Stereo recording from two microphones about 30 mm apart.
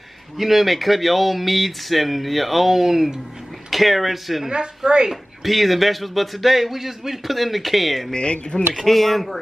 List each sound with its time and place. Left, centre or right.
0.4 s speech: centre
3.7 s speech: centre
4.5 s a woman's voice: right
5.1 s speech: centre
8.1 s speech: left
8.8 s speech: centre